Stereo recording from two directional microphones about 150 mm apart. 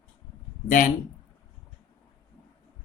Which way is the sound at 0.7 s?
60° left (ahead or behind).